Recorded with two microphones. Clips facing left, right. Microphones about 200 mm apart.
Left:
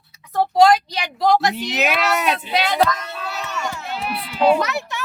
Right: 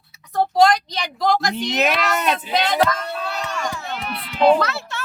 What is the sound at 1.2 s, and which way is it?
Speech, 5° left (ahead or behind).